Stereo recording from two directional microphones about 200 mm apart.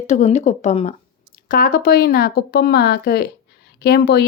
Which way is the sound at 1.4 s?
45° left (ahead or behind).